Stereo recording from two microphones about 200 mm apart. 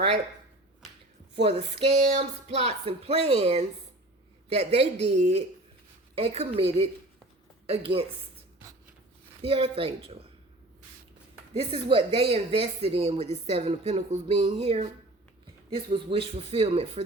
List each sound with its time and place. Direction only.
1.4 s speech: 30° right (ahead or behind)
9.4 s speech: 30° right (ahead or behind)
11.5 s speech: 25° right (ahead or behind)